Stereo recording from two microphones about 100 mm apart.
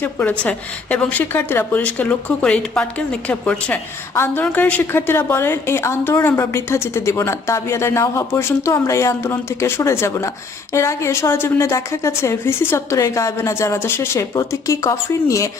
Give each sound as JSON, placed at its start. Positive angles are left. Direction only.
{"t": 0.0, "sound": "speech", "side_deg": 15}
{"t": 4.1, "sound": "a woman's voice", "side_deg": 25}